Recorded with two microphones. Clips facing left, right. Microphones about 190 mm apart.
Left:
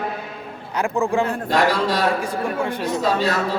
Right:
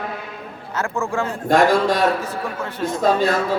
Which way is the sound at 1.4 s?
50° right (ahead or behind).